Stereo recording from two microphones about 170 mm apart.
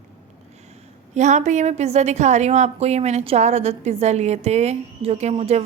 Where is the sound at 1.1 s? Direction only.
45° right (ahead or behind).